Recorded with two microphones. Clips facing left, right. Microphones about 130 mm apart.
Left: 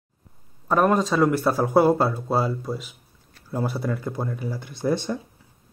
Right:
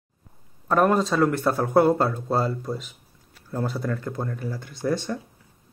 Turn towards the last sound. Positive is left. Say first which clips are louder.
# left 2 dB
turn(degrees=15)  # may be behind; listen again after turning